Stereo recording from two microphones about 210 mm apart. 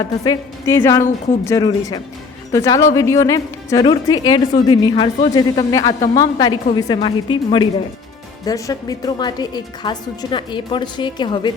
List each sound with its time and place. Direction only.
0.3 s a woman's voice: 15° left (ahead or behind)